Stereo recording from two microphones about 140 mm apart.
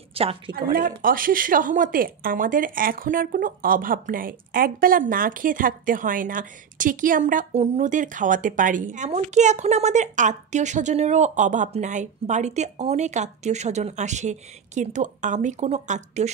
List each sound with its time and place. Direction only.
0.1 s a sound: 45° right (ahead or behind)
0.6 s a woman's voice: 90° right; by 7.4 s 70° right (ahead or behind)
7.5 s a woman's voice: 50° right (ahead or behind)